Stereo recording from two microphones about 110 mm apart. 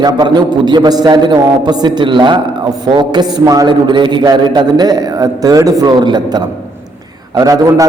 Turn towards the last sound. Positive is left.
turn(degrees=-30)  # may be behind; listen again after turning